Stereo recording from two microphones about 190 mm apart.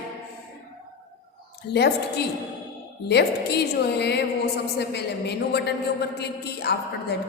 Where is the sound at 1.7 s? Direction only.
60° left (ahead or behind).